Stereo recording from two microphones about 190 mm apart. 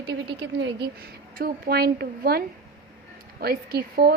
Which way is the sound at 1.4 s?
50° right (ahead or behind).